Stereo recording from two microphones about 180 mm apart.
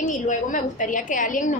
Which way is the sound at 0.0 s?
45° left (ahead or behind).